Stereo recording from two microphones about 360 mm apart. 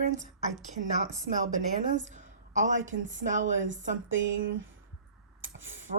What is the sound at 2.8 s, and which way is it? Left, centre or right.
Speech, right.